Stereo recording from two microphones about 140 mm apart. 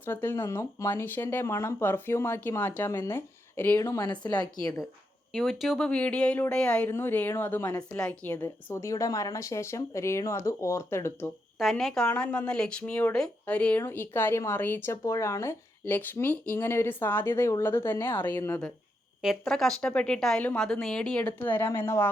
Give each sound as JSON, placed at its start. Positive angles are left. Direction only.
{"t": 0.0, "sound": "speech", "side_deg": 15}
{"t": 5.3, "sound": "speech", "side_deg": 0}
{"t": 7.9, "sound": "a woman's voice", "side_deg": 10}
{"t": 11.6, "sound": "speech", "side_deg": 0}
{"t": 19.2, "sound": "speech", "side_deg": 0}